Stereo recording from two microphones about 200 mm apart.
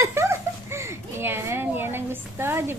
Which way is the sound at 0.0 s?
15° right (ahead or behind).